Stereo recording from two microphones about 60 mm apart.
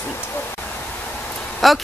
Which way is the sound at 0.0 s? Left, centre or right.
Left.